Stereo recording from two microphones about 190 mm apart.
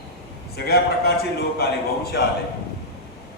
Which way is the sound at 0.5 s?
55° left (ahead or behind).